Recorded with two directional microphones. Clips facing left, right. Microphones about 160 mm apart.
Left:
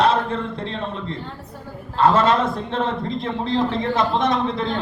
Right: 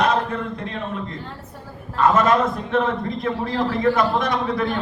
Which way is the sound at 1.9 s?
30° left (ahead or behind).